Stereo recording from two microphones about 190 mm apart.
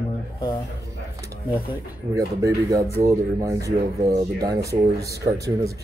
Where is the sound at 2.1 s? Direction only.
15° right (ahead or behind).